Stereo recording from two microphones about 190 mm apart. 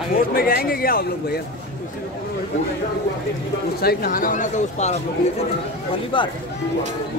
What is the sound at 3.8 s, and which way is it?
A man's voice, 50° left (ahead or behind).